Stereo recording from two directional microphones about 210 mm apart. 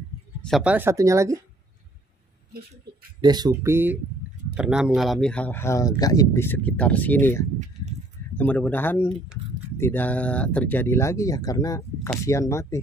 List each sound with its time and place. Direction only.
0.4 s speech: centre (ahead or behind)
3.2 s speech: 20° right (ahead or behind); by 12.7 s 15° left (ahead or behind)